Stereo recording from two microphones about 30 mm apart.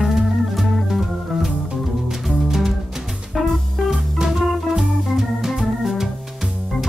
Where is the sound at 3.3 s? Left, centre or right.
Centre.